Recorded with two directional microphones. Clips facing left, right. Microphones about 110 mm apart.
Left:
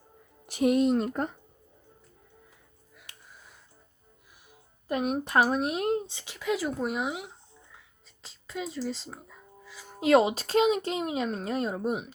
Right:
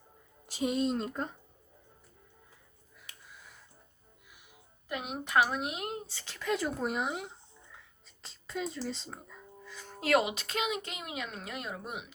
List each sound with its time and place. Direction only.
0.4 s speech: 65° left (ahead or behind)
4.9 s speech: 45° left (ahead or behind)
6.1 s speech: 15° left (ahead or behind)
8.2 s music: centre (ahead or behind)
10.0 s speech: 25° left (ahead or behind)